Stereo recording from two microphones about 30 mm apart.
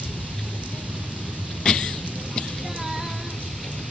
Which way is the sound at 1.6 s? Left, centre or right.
Left.